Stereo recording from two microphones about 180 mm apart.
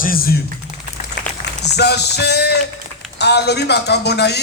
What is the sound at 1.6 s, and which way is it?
Speech, 70° left (ahead or behind).